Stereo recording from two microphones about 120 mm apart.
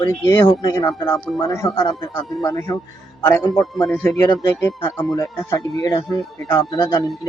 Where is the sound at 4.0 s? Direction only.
15° left (ahead or behind).